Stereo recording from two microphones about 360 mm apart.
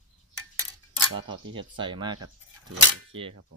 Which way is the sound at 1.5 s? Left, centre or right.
Centre.